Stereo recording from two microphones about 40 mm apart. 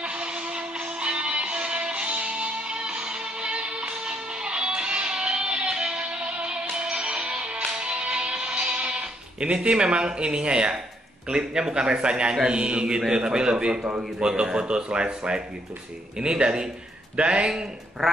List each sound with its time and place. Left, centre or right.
0.0 s music: right
11.2 s speech: centre